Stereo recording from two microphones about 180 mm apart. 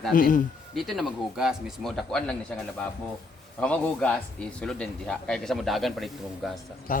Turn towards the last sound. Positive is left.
turn(degrees=50)  # may be behind; listen again after turning